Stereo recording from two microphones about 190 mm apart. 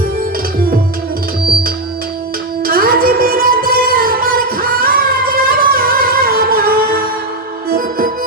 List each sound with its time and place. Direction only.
2.6 s music: 50° right (ahead or behind)